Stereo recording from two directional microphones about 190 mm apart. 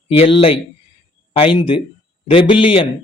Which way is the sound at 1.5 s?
30° left (ahead or behind).